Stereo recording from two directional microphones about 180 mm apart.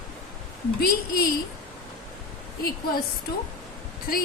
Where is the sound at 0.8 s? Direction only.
55° left (ahead or behind).